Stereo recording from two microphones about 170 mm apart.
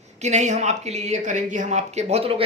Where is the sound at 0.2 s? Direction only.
45° right (ahead or behind).